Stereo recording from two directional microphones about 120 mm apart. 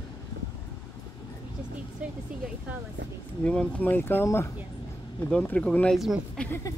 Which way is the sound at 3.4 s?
10° left (ahead or behind).